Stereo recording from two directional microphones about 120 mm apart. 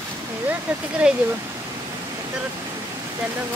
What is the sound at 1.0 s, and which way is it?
Speech, 10° right (ahead or behind).